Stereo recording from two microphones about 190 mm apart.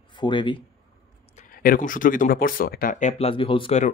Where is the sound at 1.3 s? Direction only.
45° left (ahead or behind).